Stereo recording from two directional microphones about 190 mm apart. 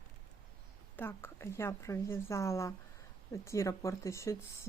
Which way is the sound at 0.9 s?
10° left (ahead or behind).